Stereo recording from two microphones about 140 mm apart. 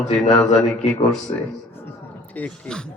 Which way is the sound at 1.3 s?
35° left (ahead or behind).